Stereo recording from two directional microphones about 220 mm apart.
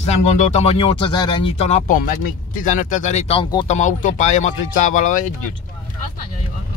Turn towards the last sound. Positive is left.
turn(degrees=35)  # may be behind; listen again after turning